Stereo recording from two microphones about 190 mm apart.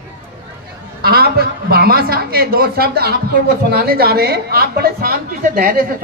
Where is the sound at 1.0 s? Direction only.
55° right (ahead or behind).